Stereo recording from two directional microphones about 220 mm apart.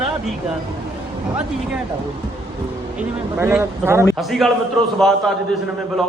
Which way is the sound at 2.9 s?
10° right (ahead or behind).